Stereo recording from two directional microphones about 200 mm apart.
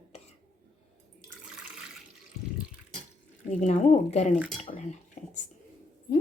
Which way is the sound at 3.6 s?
35° left (ahead or behind).